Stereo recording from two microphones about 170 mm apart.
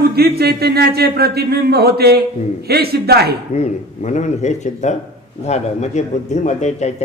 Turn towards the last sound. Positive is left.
turn(degrees=40)  # may be behind; listen again after turning